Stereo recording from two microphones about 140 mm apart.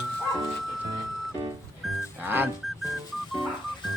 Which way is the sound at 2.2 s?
15° right (ahead or behind).